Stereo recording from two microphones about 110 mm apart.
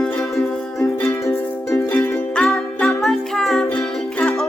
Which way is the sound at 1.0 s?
25° left (ahead or behind).